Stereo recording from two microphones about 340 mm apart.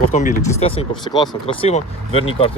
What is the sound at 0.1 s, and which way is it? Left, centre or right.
Speech, centre.